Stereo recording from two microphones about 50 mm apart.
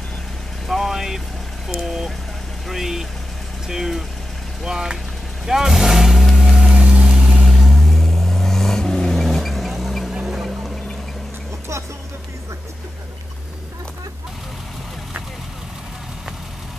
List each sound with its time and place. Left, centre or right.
0.7 s vehicle: centre
1.7 s speech: centre
5.5 s vehicle: centre
6.5 s vehicle: centre
7.4 s vehicle: centre
10.1 s music: centre